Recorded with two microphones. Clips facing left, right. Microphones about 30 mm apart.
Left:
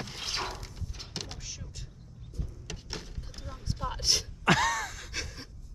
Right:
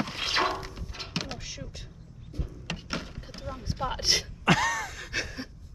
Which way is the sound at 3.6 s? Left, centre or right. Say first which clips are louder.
Right 3 dB; right.